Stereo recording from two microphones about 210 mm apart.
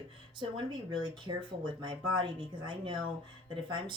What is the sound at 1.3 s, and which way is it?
Speech, 20° right (ahead or behind).